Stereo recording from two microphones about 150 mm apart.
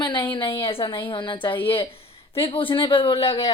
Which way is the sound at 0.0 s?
35° left (ahead or behind).